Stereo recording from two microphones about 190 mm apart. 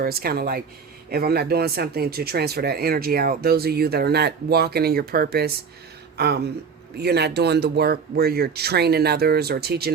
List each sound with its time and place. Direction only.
0.0 s speech: 50° right (ahead or behind)